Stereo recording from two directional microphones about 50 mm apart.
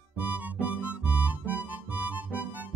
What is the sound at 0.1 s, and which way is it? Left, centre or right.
Music, right.